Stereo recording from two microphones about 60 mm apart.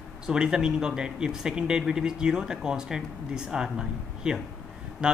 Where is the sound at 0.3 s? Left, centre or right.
Centre.